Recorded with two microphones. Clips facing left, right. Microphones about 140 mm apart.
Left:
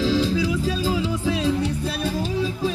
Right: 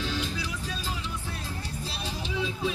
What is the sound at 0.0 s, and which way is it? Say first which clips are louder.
Music: left 12 dB; 90° left.